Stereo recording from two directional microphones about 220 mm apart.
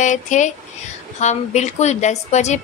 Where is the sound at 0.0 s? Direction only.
35° left (ahead or behind).